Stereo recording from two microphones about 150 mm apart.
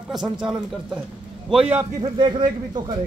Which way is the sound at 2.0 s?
30° right (ahead or behind).